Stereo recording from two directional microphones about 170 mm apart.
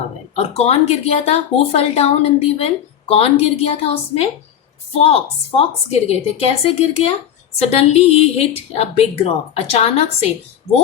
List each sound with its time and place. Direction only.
0.3 s speech: 40° left (ahead or behind)